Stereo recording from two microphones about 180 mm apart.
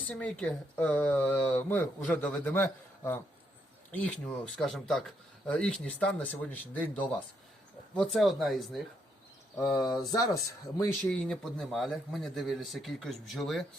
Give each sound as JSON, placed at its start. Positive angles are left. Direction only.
{"t": 0.1, "sound": "a man's voice", "side_deg": 5}
{"t": 9.6, "sound": "speech", "side_deg": 20}
{"t": 11.0, "sound": "a man's voice", "side_deg": 5}